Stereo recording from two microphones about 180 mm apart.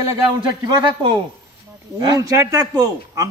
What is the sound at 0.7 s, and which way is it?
A man's voice, 20° right (ahead or behind).